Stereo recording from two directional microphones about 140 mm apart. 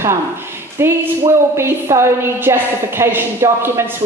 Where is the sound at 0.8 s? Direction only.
20° right (ahead or behind).